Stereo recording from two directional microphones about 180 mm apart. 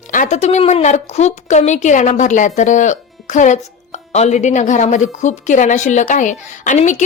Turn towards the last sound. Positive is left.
turn(degrees=40)  # may be behind; listen again after turning